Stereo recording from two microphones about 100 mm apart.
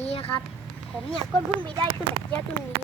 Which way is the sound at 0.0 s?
90° left.